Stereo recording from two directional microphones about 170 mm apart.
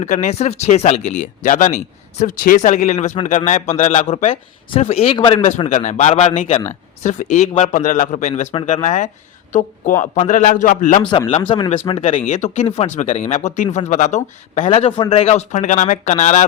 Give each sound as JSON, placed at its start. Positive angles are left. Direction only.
{"t": 0.0, "sound": "a man's voice", "side_deg": 45}
{"t": 5.4, "sound": "a man's voice", "side_deg": 40}
{"t": 11.5, "sound": "speech", "side_deg": 30}
{"t": 12.0, "sound": "a man's voice", "side_deg": 45}